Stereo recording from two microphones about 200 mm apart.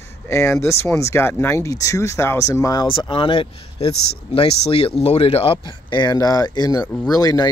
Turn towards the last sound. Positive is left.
turn(degrees=20)  # may be behind; listen again after turning